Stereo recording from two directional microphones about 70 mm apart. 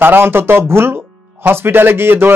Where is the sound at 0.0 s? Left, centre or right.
Right.